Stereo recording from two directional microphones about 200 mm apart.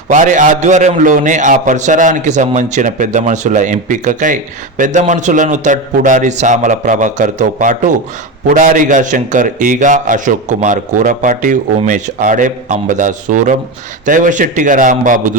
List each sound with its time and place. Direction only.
0.1 s a man's voice: 40° right (ahead or behind)